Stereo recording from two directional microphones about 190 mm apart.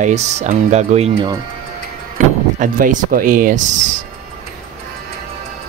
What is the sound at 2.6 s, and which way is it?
Speech, 45° right (ahead or behind).